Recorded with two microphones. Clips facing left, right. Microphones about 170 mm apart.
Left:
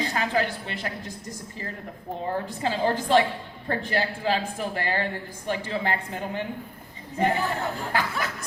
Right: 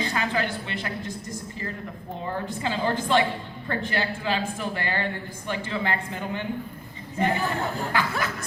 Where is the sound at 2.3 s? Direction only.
35° left (ahead or behind).